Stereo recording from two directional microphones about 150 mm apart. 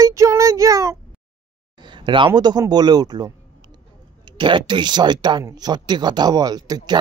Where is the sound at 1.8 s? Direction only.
30° right (ahead or behind).